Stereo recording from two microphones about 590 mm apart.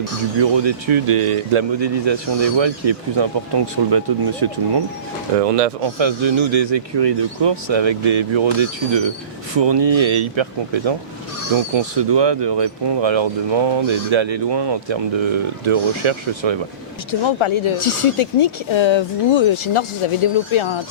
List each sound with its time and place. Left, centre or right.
0.3 s speech: right
5.4 s speech: right
6.0 s speech: right
17.1 s speech: left